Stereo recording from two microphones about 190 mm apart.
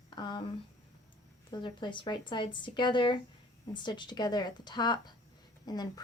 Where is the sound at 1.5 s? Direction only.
25° left (ahead or behind).